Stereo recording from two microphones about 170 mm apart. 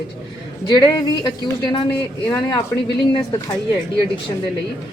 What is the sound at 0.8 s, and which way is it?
Speech, 20° left (ahead or behind).